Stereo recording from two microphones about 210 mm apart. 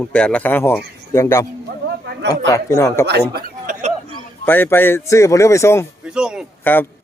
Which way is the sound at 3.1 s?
45° right (ahead or behind).